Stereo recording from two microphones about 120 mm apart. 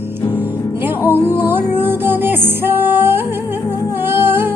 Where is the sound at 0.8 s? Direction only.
15° right (ahead or behind).